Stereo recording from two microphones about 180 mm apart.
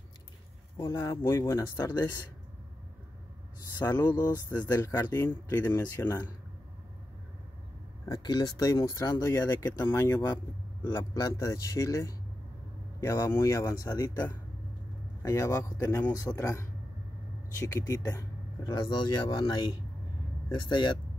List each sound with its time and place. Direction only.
0.7 s speech: 15° left (ahead or behind)
3.7 s speech: 20° left (ahead or behind)
8.0 s speech: 25° left (ahead or behind)